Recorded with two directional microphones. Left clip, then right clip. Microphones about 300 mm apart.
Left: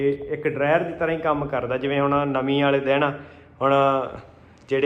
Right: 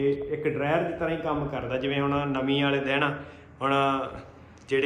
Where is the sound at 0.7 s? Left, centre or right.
Centre.